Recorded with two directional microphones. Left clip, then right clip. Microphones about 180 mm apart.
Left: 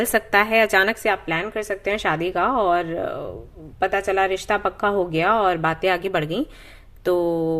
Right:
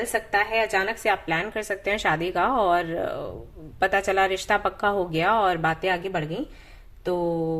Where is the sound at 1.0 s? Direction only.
20° left (ahead or behind).